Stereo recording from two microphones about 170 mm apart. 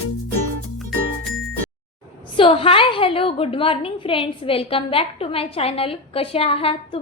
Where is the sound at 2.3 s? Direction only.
30° left (ahead or behind).